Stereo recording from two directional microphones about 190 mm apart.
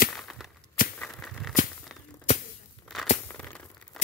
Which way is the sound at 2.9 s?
Centre (ahead or behind).